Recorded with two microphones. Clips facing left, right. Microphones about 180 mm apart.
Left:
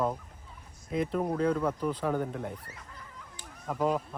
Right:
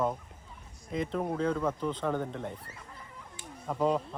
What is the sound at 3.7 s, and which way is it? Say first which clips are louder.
Speech: right 1 dB; 5° left (ahead or behind).